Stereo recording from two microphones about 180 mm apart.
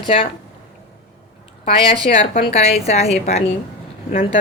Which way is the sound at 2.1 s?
50° left (ahead or behind).